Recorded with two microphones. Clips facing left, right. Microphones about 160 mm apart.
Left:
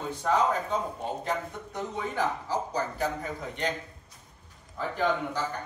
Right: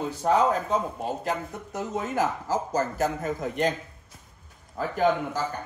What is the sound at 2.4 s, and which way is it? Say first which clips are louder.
A man's voice: right 4 dB; 45° right (ahead or behind).